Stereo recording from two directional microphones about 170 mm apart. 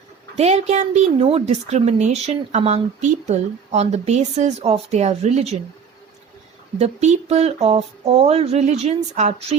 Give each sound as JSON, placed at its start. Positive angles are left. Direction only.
{"t": 0.3, "sound": "speech", "side_deg": -40}
{"t": 6.7, "sound": "speech", "side_deg": -40}